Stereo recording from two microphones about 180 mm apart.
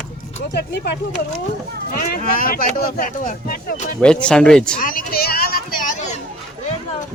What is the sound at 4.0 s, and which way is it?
Speech, 5° left (ahead or behind).